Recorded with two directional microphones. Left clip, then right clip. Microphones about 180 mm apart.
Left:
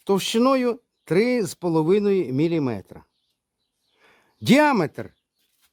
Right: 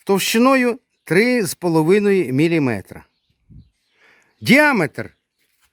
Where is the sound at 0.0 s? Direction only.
15° right (ahead or behind).